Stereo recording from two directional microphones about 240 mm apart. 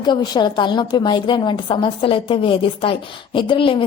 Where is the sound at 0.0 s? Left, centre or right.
Centre.